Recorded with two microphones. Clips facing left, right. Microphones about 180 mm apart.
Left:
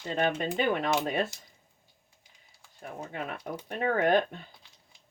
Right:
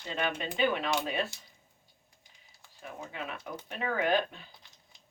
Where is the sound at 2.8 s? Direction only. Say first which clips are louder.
Left 3 dB; 50° left (ahead or behind).